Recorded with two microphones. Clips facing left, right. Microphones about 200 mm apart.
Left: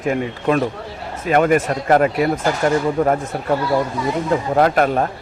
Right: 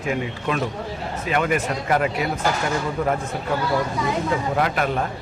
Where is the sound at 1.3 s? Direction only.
45° left (ahead or behind).